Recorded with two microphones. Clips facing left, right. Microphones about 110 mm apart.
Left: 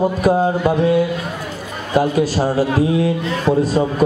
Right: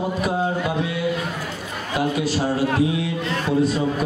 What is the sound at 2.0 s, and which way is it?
A man's voice, 40° left (ahead or behind).